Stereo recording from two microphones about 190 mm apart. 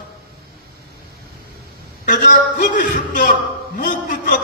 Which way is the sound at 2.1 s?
45° left (ahead or behind).